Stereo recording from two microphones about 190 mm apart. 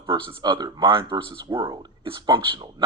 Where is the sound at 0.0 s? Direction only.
25° right (ahead or behind).